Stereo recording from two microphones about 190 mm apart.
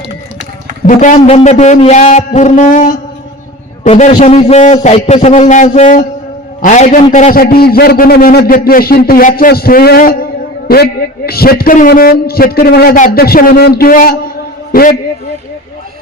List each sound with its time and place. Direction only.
0.9 s a man's voice: 40° left (ahead or behind)
7.4 s a man's voice: 55° left (ahead or behind)
11.3 s a man's voice: 55° left (ahead or behind)